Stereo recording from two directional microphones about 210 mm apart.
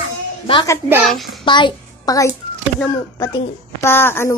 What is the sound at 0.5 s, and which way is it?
A woman's voice, 25° left (ahead or behind).